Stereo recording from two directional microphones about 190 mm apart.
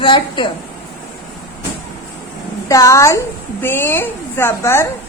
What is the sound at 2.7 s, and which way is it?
A woman's voice, 15° left (ahead or behind).